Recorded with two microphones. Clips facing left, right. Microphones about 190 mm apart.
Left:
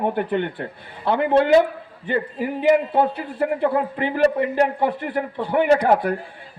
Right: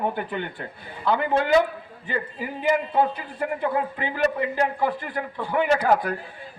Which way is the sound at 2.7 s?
35° left (ahead or behind).